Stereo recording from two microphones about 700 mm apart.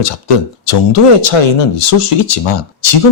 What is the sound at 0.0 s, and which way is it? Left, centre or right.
Speech, left.